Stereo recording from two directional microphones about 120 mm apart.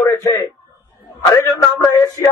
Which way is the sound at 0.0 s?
25° left (ahead or behind).